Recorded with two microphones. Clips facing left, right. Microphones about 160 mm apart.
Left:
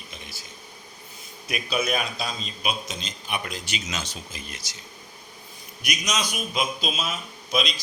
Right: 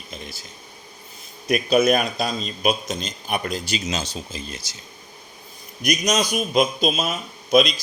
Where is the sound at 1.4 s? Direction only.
45° right (ahead or behind); by 4.8 s 30° right (ahead or behind).